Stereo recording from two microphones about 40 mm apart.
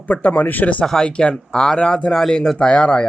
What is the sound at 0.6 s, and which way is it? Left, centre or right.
Speech, left.